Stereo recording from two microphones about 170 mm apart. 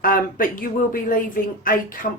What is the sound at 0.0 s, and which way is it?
A woman's voice, 55° left (ahead or behind).